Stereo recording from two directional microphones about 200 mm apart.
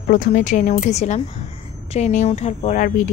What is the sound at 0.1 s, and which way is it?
Speech, 40° left (ahead or behind).